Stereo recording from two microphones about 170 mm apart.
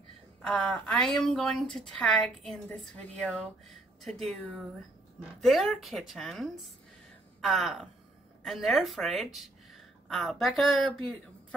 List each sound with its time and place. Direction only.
0.4 s a woman's voice: 5° left (ahead or behind)